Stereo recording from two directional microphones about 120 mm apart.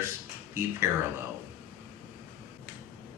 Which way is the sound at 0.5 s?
20° right (ahead or behind).